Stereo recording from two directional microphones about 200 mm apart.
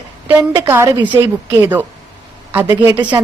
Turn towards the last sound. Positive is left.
turn(degrees=-10)  # may be behind; listen again after turning